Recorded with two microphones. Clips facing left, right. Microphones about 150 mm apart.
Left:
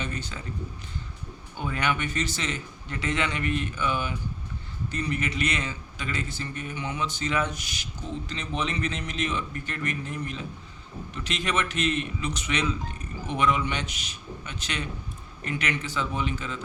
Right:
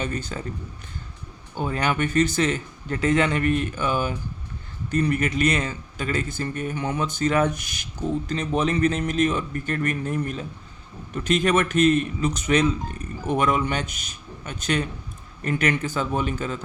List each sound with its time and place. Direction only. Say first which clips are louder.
0.0 s a man's voice: right 5 dB; 45° right (ahead or behind)
1.5 s speech: right 4 dB; 40° right (ahead or behind)
2.1 s a man's voice: right 10 dB; 55° right (ahead or behind)